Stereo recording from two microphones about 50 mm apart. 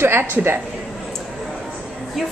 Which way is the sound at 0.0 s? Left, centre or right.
Right.